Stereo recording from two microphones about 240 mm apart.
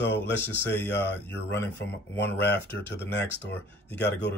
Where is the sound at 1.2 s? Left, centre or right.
Centre.